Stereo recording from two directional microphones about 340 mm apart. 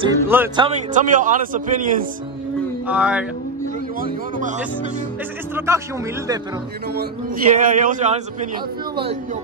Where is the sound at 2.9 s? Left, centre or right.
Centre.